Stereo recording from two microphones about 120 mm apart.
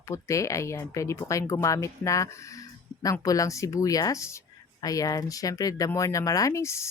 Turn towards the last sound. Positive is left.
turn(degrees=25)  # may be behind; listen again after turning